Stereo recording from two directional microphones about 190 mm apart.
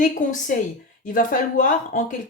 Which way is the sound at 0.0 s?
40° left (ahead or behind).